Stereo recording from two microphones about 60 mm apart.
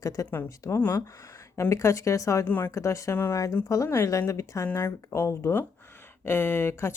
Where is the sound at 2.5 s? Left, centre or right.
Left.